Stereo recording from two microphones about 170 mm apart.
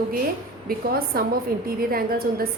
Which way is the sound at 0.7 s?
60° right (ahead or behind).